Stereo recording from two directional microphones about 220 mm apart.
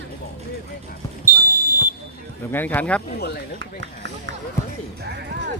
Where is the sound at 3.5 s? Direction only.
55° right (ahead or behind).